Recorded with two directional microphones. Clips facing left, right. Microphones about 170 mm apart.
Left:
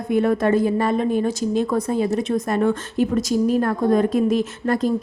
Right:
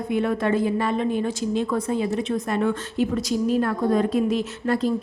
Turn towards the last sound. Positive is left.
turn(degrees=45)  # may be behind; listen again after turning